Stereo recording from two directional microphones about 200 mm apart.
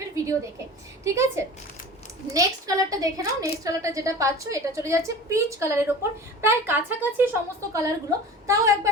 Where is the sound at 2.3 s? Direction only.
15° right (ahead or behind).